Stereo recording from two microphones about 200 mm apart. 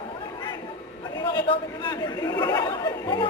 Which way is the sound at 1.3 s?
20° left (ahead or behind).